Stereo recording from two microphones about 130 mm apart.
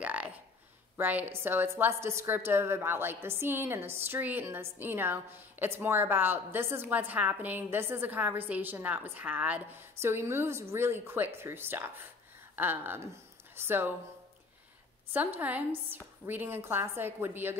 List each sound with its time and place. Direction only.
0.0 s a sound: 10° right (ahead or behind)
0.9 s a woman's voice: 15° right (ahead or behind)
15.1 s a woman's voice: 15° right (ahead or behind)